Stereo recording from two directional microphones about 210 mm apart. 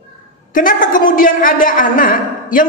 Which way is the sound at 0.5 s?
40° left (ahead or behind).